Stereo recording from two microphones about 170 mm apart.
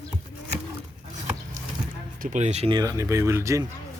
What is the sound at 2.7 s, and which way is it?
Speech, 20° right (ahead or behind).